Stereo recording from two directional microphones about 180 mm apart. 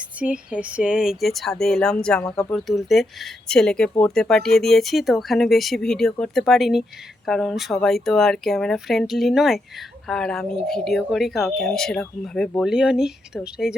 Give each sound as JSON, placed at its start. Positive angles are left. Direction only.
{"t": 0.2, "sound": "speech", "side_deg": -5}